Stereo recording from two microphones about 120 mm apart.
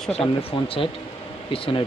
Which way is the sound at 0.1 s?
55° left (ahead or behind).